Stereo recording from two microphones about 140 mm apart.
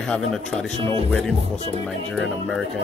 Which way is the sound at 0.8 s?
40° right (ahead or behind).